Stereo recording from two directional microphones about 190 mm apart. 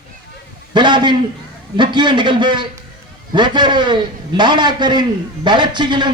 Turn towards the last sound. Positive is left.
turn(degrees=-25)  # may be behind; listen again after turning